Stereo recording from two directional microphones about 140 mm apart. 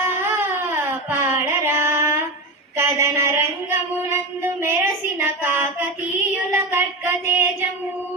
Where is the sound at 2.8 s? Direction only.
20° right (ahead or behind).